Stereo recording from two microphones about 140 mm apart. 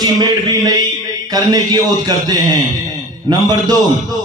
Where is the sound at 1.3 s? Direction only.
30° right (ahead or behind).